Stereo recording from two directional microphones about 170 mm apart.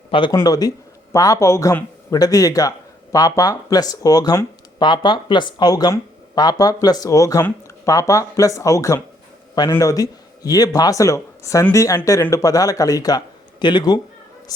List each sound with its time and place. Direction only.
0.1 s speech: 30° left (ahead or behind)